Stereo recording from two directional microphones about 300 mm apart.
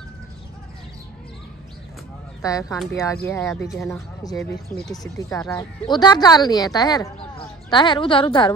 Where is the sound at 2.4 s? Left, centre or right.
Centre.